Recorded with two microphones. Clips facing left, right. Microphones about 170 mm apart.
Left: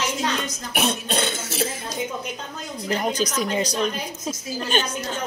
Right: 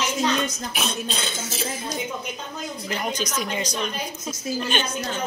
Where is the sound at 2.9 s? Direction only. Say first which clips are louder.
Left 5 dB; 35° left (ahead or behind).